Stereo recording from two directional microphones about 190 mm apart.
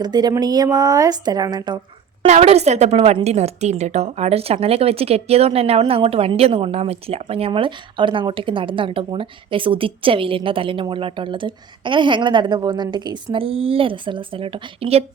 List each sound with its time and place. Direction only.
0.0 s a woman's voice: 20° right (ahead or behind)
2.2 s a woman's voice: 35° right (ahead or behind)